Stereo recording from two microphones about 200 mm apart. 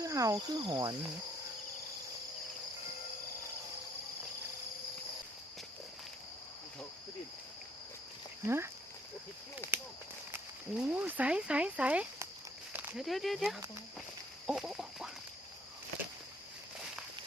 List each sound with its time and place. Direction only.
0.0 s speech: 15° right (ahead or behind)
8.4 s speech: 10° right (ahead or behind)
9.7 s a sound: 10° right (ahead or behind)
10.3 s speech: 10° right (ahead or behind)
14.4 s duck: 5° right (ahead or behind)